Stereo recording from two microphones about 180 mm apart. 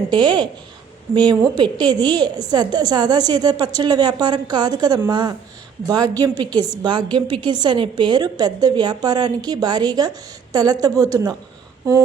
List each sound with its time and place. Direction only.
0.1 s a woman's voice: 25° right (ahead or behind)